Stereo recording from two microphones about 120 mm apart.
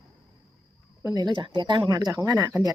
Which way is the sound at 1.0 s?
35° right (ahead or behind).